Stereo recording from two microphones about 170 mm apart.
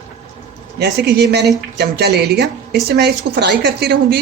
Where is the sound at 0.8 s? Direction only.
85° right.